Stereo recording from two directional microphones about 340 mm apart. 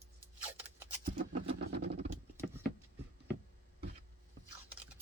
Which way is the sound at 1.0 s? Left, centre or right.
Right.